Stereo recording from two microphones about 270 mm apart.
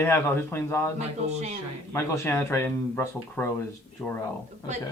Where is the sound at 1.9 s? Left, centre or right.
Centre.